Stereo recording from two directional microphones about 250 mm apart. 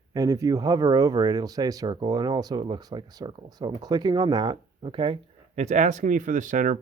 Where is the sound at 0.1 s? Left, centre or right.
Centre.